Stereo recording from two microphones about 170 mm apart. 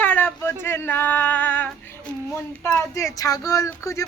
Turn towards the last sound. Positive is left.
turn(degrees=20)  # may be behind; listen again after turning